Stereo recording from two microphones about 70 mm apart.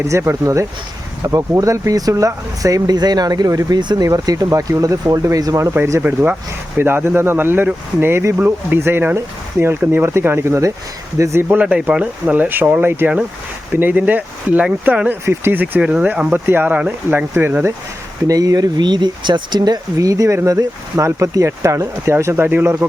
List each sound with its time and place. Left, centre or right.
0.0 s speech: right
3.8 s speech: right
5.7 s speech: right
6.0 s speech: right
11.4 s speech: centre
15.2 s speech: right
15.6 s speech: centre
18.3 s speech: right
22.1 s speech: right
22.4 s speech: right